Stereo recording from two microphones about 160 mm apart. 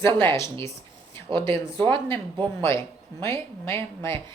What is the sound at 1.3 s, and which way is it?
Speech, 30° right (ahead or behind).